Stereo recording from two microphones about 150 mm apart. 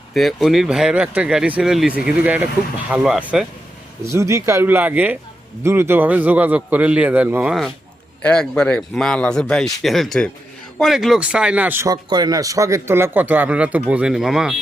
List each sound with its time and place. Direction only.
0.1 s a man's voice: centre (ahead or behind)
4.1 s a man's voice: 20° right (ahead or behind)
8.2 s a man's voice: 5° left (ahead or behind); by 11.9 s 10° right (ahead or behind)
11.9 s a man's voice: 25° right (ahead or behind); by 14.5 s 5° right (ahead or behind)